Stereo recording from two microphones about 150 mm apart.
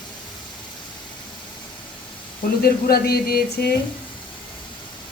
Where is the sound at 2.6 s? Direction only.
90° left.